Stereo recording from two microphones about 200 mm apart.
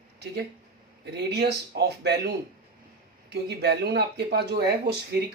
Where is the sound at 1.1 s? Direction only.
55° right (ahead or behind).